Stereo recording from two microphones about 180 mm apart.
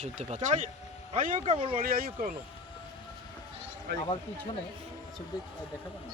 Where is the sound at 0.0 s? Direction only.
40° right (ahead or behind).